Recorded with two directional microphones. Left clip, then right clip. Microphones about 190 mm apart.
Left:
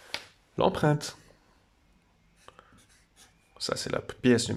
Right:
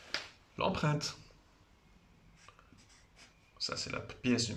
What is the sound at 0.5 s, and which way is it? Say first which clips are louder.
Speech: left 9 dB; 40° left (ahead or behind).